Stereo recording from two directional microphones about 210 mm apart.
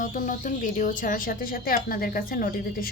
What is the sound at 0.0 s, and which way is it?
A woman's voice, 40° left (ahead or behind).